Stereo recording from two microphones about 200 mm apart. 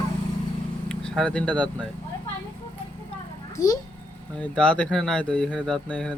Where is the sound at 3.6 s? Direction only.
15° left (ahead or behind).